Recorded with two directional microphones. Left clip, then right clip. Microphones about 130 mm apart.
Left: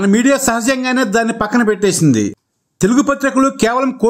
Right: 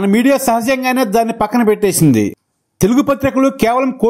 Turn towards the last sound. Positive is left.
turn(degrees=-10)  # may be behind; listen again after turning